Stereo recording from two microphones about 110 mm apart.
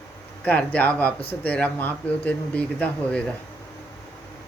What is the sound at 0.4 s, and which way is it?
Speech, 15° left (ahead or behind).